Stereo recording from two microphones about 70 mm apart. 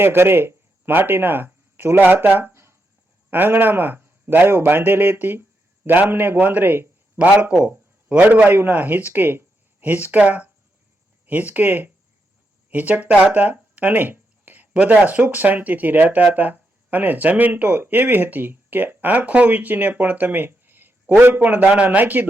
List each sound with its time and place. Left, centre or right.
0.0 s a man's voice: right